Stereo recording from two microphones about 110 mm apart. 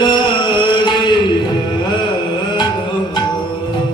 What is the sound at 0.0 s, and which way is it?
Music, 45° left (ahead or behind).